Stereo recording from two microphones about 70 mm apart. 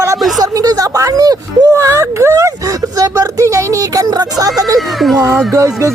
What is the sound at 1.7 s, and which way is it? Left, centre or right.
Speech, right.